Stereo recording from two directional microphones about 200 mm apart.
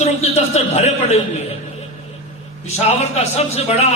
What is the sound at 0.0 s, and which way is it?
A man's voice, 30° left (ahead or behind).